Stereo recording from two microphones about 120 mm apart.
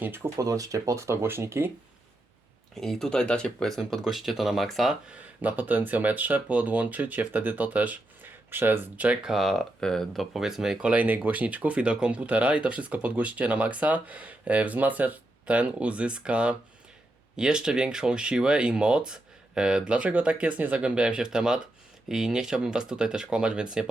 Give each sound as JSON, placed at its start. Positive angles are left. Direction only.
{"t": 0.0, "sound": "speech", "side_deg": -15}
{"t": 0.3, "sound": "speech", "side_deg": -30}
{"t": 2.8, "sound": "speech", "side_deg": 5}
{"t": 5.4, "sound": "speech", "side_deg": -15}